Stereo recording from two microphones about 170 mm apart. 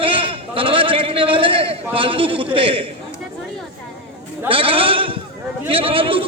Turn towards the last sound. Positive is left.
turn(degrees=-30)  # may be behind; listen again after turning